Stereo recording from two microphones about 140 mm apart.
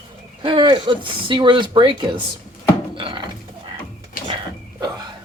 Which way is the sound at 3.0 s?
40° right (ahead or behind).